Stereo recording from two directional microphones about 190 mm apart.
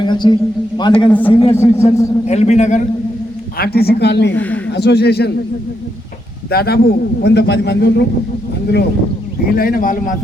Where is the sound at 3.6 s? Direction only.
55° left (ahead or behind).